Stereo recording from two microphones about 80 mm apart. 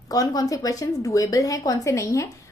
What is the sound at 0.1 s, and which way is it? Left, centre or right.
A woman's voice, left.